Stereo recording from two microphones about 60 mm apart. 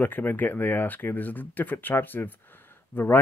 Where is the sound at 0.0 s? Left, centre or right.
Left.